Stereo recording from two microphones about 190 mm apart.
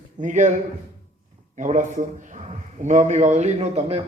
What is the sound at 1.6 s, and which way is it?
A man's voice, 40° right (ahead or behind).